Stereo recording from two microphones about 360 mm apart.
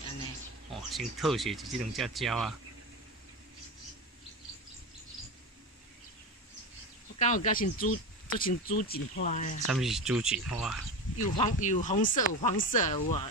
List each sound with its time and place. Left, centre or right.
0.7 s speech: centre
7.2 s speech: left
9.7 s speech: centre
11.3 s speech: centre